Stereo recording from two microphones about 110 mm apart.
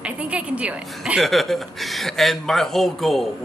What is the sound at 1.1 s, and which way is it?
Speech, centre (ahead or behind).